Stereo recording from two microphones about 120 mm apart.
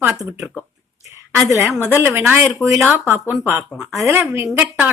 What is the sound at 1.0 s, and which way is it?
A woman's voice, 25° right (ahead or behind).